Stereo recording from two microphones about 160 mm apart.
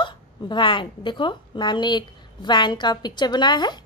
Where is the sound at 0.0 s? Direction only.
30° left (ahead or behind).